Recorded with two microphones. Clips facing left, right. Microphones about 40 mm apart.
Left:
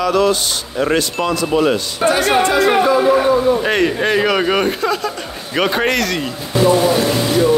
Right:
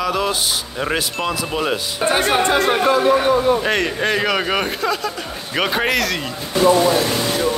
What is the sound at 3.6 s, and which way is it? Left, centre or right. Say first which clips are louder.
Speech: left 3 dB; centre.